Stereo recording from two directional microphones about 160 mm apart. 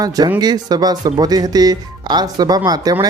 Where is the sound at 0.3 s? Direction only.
25° right (ahead or behind).